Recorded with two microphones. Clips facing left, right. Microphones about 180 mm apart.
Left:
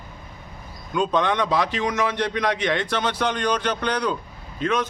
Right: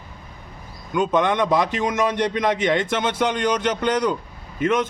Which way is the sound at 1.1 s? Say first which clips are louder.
Right 3 dB; 20° right (ahead or behind).